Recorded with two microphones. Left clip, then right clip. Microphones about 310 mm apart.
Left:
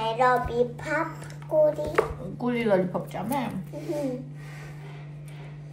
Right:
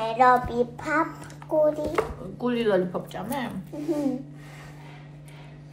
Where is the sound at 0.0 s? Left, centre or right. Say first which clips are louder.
Right 3 dB; right.